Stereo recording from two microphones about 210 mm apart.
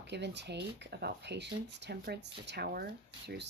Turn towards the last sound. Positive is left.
turn(degrees=-50)  # may be behind; listen again after turning